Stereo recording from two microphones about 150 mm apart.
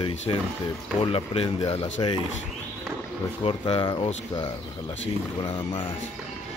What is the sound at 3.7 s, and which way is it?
Speech, 35° left (ahead or behind).